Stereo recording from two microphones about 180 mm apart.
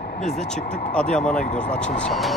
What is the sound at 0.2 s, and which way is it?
Speech, 40° left (ahead or behind).